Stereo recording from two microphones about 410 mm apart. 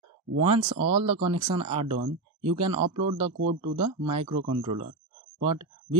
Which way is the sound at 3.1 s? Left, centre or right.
Right.